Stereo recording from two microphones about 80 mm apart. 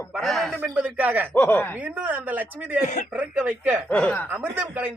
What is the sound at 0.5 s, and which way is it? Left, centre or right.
Speech, right.